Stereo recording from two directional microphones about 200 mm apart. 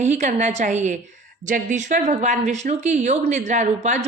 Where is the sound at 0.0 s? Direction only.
35° right (ahead or behind).